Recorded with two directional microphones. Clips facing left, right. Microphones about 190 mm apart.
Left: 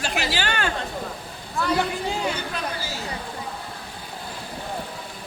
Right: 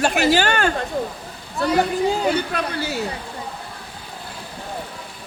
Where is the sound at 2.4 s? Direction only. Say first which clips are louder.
Right 6 dB; 65° right (ahead or behind).